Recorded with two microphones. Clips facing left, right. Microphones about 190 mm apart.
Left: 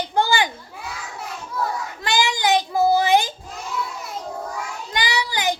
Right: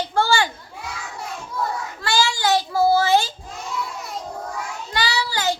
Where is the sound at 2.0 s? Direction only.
20° left (ahead or behind).